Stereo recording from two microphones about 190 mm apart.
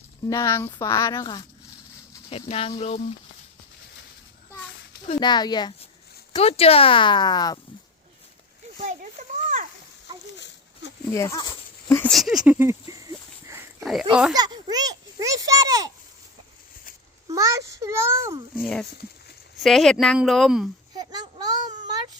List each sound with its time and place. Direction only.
0.3 s speech: 15° left (ahead or behind); by 3.0 s 30° left (ahead or behind)
5.0 s speech: 25° left (ahead or behind)
6.3 s speech: 35° left (ahead or behind)
8.8 s a sound: 40° right (ahead or behind)
11.1 s speech: 15° left (ahead or behind)
12.1 s speech: centre (ahead or behind)
12.9 s a sound: 15° right (ahead or behind)
14.1 s speech: 5° right (ahead or behind)
14.3 s a child's voice: 20° right (ahead or behind)
17.2 s a child's voice: 15° right (ahead or behind)
18.6 s speech: centre (ahead or behind)
20.9 s child singing: 20° right (ahead or behind)